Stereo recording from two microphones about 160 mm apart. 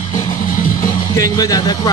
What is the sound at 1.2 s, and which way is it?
Music, 25° left (ahead or behind).